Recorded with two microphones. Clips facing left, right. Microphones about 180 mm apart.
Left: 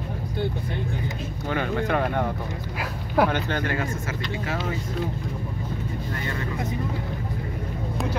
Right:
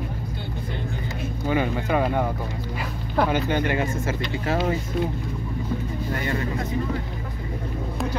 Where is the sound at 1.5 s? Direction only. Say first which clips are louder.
Right 2 dB; 10° right (ahead or behind).